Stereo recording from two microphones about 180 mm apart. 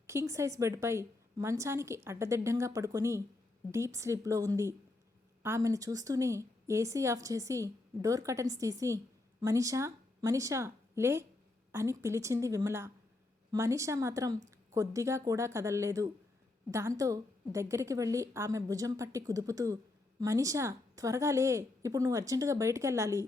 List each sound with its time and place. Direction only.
0.1 s a woman's voice: 15° right (ahead or behind)